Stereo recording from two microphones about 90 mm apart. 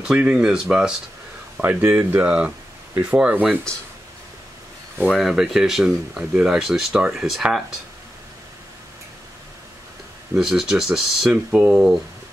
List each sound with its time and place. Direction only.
0.0 s speech: 5° right (ahead or behind)
1.6 s speech: 20° right (ahead or behind)
5.1 s speech: 5° right (ahead or behind)
10.3 s speech: 5° right (ahead or behind)